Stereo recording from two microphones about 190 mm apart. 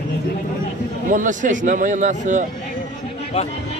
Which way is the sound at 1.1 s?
40° right (ahead or behind).